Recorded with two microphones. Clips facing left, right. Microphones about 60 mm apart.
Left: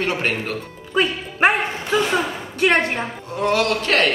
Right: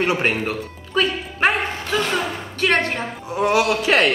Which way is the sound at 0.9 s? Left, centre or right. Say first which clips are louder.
Left 1 dB; left.